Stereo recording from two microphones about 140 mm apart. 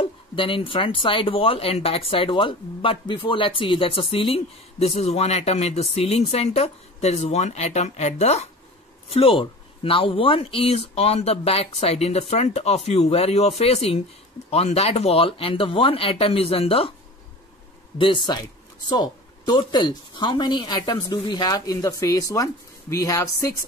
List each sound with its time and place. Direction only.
0.0 s speech: 40° left (ahead or behind)
9.1 s speech: 40° left (ahead or behind)
17.9 s a woman's voice: 35° left (ahead or behind)